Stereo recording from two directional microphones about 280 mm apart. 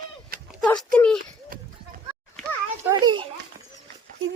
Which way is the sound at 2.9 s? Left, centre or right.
Centre.